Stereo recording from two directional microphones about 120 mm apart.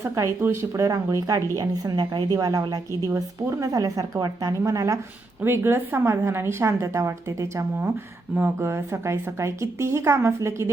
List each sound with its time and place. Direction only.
0.2 s a woman's voice: 20° right (ahead or behind)
8.4 s a woman's voice: 20° right (ahead or behind)